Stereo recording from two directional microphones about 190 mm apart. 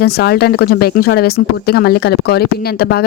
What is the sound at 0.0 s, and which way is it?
Speech, 60° left (ahead or behind).